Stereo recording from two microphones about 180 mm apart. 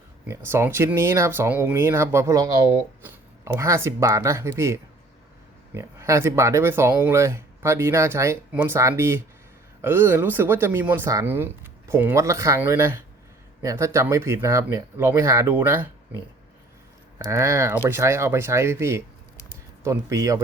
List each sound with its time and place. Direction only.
0.3 s speech: 15° right (ahead or behind)
17.2 s speech: 15° right (ahead or behind)